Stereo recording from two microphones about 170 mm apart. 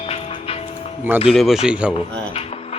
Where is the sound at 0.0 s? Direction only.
35° left (ahead or behind).